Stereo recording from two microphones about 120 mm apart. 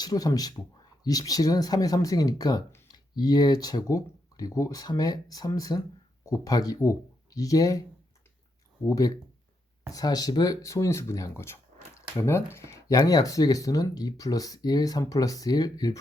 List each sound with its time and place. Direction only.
0.0 s speech: 30° left (ahead or behind)